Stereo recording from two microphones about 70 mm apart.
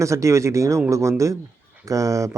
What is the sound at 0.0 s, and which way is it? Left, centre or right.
Speech, right.